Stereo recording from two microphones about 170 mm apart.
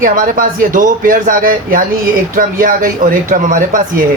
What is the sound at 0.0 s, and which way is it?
Speech, 55° right (ahead or behind).